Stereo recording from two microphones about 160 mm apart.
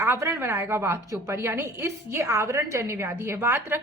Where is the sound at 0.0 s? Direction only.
15° right (ahead or behind).